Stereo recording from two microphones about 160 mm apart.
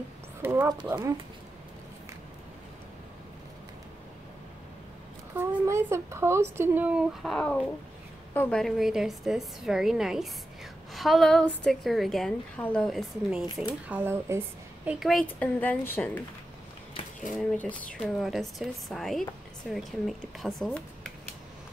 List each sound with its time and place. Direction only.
0.4 s speech: 15° right (ahead or behind)
5.3 s a woman's voice: 15° right (ahead or behind)
14.9 s a woman's voice: centre (ahead or behind)
15.2 s a woman's voice: 10° left (ahead or behind)
17.3 s a woman's voice: 5° left (ahead or behind)